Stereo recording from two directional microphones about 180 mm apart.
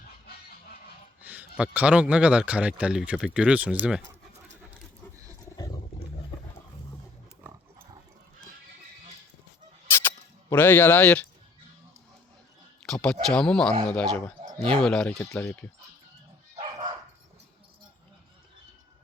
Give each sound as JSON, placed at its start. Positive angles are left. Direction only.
{"t": 1.2, "sound": "speech", "side_deg": -10}
{"t": 5.1, "sound": "dog", "side_deg": -15}
{"t": 9.9, "sound": "a sound", "side_deg": 10}
{"t": 12.8, "sound": "speech", "side_deg": 5}